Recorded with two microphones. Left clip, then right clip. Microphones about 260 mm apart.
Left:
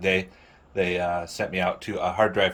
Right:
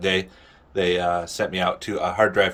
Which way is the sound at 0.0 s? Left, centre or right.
Centre.